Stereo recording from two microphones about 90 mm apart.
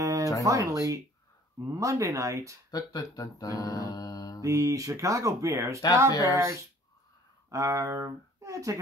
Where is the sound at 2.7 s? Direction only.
40° left (ahead or behind).